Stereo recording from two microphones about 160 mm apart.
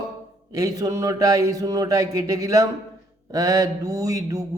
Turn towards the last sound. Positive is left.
turn(degrees=-20)  # may be behind; listen again after turning